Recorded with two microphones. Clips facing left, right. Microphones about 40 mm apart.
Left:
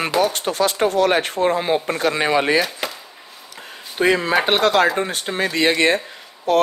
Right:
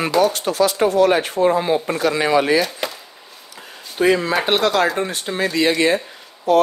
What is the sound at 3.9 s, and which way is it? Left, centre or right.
Speech, left.